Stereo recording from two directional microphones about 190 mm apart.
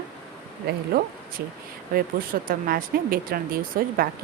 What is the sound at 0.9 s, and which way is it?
Speech, 50° right (ahead or behind).